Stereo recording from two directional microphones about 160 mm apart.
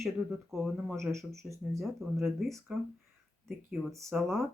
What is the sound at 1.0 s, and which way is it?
Speech, 20° right (ahead or behind).